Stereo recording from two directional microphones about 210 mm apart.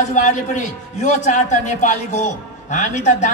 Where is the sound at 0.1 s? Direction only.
35° left (ahead or behind).